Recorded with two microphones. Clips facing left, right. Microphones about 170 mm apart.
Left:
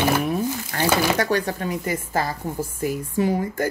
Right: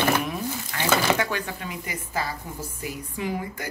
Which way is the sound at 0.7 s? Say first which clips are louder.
Left 2 dB; 40° left (ahead or behind).